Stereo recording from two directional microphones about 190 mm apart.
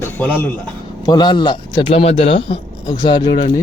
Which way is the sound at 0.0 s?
10° left (ahead or behind).